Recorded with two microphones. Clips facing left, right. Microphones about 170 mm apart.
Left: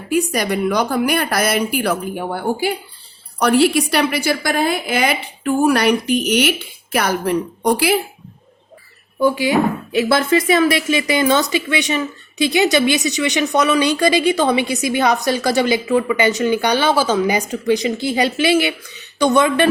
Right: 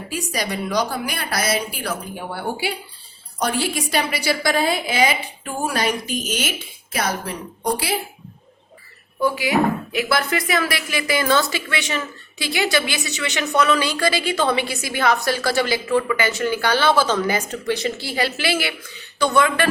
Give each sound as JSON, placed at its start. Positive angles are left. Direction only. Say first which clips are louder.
{"t": 0.1, "sound": "a woman's voice", "louder": "left 9 dB", "side_deg": 55}
{"t": 3.4, "sound": "a woman's voice", "louder": "left 9 dB", "side_deg": 65}
{"t": 9.2, "sound": "speech", "louder": "left 4 dB", "side_deg": 30}